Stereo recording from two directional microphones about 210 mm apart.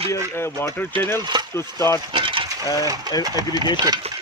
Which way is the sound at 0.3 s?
10° left (ahead or behind).